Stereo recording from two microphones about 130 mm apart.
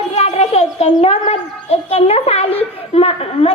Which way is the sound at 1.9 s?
50° left (ahead or behind).